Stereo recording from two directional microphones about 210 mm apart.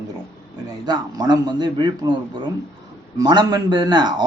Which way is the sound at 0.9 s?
20° right (ahead or behind).